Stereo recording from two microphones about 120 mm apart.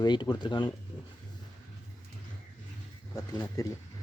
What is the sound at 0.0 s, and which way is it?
Speech, 35° left (ahead or behind).